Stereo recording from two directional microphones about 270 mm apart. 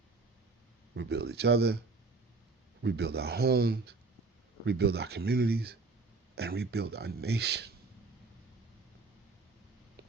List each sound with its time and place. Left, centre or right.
0.9 s speech: right
2.8 s speech: right